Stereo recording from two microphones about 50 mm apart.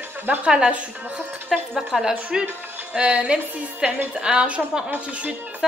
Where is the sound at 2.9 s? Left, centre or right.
Right.